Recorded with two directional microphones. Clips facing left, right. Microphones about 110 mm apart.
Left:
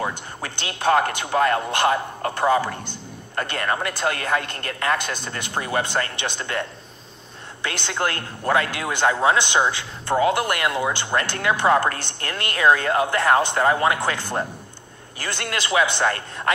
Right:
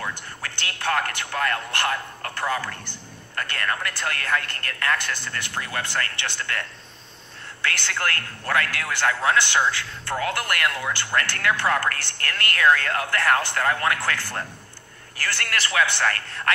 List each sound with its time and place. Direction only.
0.0 s a man's voice: 20° left (ahead or behind)